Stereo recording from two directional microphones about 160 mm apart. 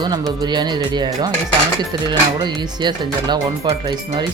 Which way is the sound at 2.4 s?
30° right (ahead or behind).